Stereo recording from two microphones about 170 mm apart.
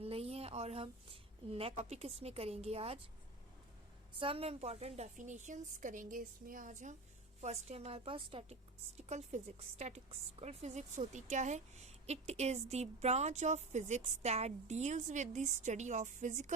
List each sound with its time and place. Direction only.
0.0 s a woman's voice: 35° right (ahead or behind)
4.1 s a woman's voice: 30° right (ahead or behind)
9.0 s a woman's voice: 45° right (ahead or behind)